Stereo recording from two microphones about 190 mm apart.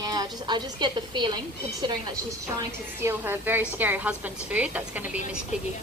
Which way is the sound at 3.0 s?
10° right (ahead or behind).